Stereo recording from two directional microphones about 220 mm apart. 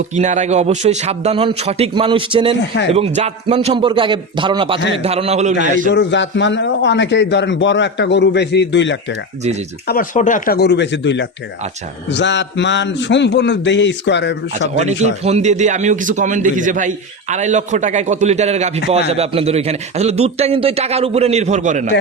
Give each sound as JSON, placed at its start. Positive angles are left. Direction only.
{"t": 0.2, "sound": "a man's voice", "side_deg": -30}
{"t": 5.9, "sound": "a man's voice", "side_deg": 55}
{"t": 9.8, "sound": "a man's voice", "side_deg": 40}
{"t": 14.6, "sound": "a man's voice", "side_deg": -30}